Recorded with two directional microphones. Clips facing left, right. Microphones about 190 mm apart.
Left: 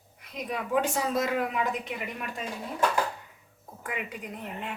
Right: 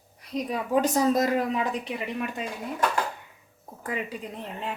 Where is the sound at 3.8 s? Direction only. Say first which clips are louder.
Right 4 dB; 35° right (ahead or behind).